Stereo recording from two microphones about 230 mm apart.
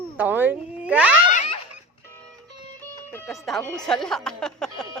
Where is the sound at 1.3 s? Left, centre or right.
Left.